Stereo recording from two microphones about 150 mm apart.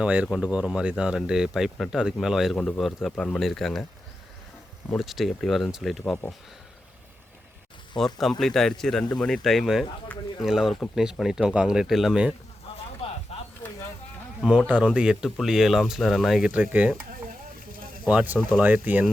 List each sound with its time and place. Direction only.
0.0 s speech: 10° right (ahead or behind)
4.9 s speech: centre (ahead or behind)
7.9 s speech: centre (ahead or behind)
10.4 s speech: centre (ahead or behind)
13.3 s chop: 40° left (ahead or behind)
14.7 s speech: 10° right (ahead or behind)
18.0 s speech: 10° right (ahead or behind)